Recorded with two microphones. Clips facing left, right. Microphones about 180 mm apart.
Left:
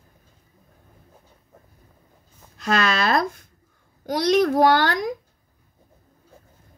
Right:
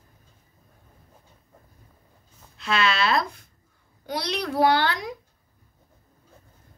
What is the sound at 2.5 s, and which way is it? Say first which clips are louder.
A woman's voice: left 2 dB; 45° left (ahead or behind).